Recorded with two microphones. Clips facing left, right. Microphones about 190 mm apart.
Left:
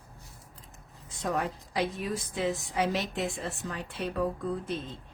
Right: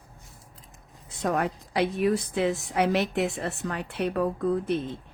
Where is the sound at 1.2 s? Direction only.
65° right (ahead or behind).